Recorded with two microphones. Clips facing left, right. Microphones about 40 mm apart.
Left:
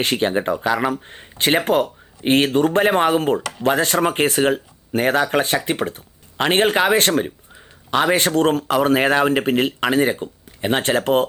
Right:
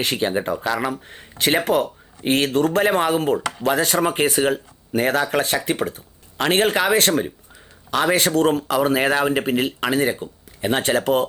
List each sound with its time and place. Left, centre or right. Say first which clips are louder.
0.0 s speech: left 2 dB; left
0.6 s speech: left 3 dB; centre
0.9 s speech: left 3 dB; left
9.4 s speech: left 2 dB; left